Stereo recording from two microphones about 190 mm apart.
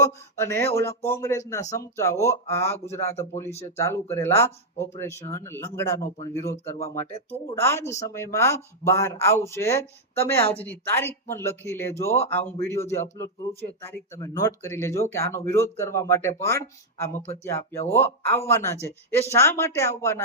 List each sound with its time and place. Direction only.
0.0 s a man's voice: 15° left (ahead or behind)